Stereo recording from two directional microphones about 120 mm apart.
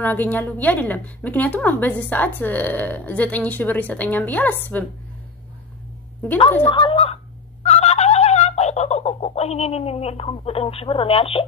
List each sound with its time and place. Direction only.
0.0 s a woman's voice: 15° left (ahead or behind)
6.7 s speech: 45° left (ahead or behind)
7.6 s turkey: 60° left (ahead or behind)